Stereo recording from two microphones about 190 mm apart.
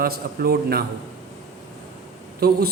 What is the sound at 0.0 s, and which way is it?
Speech, 55° right (ahead or behind).